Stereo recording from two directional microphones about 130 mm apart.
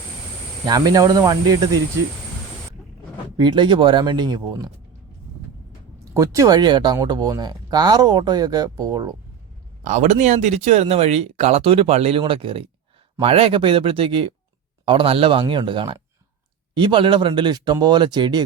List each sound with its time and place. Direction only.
0.6 s speech: 30° right (ahead or behind)
3.3 s speech: 35° right (ahead or behind)
6.1 s speech: 25° right (ahead or behind)
9.8 s speech: 65° right (ahead or behind); by 18.4 s 35° right (ahead or behind)